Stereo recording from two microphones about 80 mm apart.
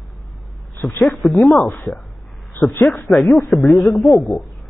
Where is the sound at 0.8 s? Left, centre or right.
Left.